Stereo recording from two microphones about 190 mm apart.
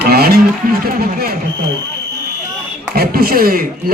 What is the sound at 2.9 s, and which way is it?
Speech, 50° right (ahead or behind).